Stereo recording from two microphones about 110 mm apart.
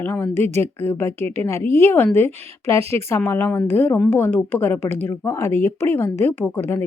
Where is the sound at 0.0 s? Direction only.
20° left (ahead or behind).